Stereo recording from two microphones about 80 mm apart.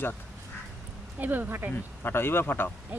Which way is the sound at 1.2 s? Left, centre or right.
Right.